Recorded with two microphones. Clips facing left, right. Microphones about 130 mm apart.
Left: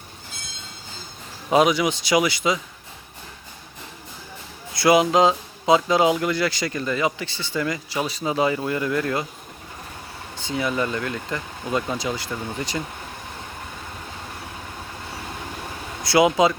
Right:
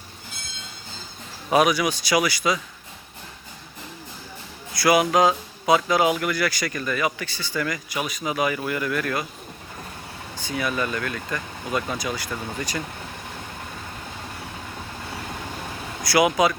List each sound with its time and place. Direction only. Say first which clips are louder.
1.5 s speech: left 1 dB; 25° left (ahead or behind)
4.7 s speech: left 2 dB; 25° left (ahead or behind)
10.3 s speech: left 2 dB; 25° left (ahead or behind)
16.0 s speech: left 2 dB; 25° left (ahead or behind)